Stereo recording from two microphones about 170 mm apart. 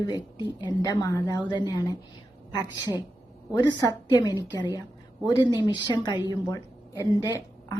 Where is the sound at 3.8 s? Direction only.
20° left (ahead or behind).